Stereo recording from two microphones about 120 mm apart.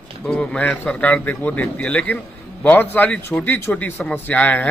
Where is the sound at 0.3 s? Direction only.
10° left (ahead or behind).